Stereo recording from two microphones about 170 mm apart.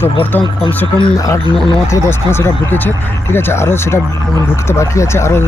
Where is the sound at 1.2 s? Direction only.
20° left (ahead or behind).